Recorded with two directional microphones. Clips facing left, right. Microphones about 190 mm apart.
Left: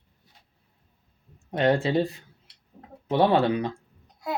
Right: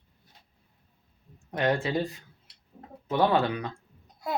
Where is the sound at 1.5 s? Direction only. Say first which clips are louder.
Left 4 dB; 25° left (ahead or behind).